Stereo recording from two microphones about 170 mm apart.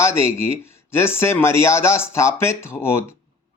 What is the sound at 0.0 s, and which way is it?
A man's voice, 15° left (ahead or behind).